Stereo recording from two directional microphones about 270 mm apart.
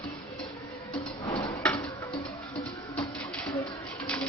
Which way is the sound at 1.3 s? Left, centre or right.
Centre.